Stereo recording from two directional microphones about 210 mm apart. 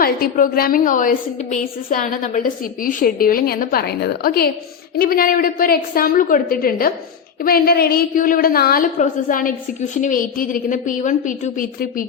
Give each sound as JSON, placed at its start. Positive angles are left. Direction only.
{"t": 0.0, "sound": "a woman's voice", "side_deg": 40}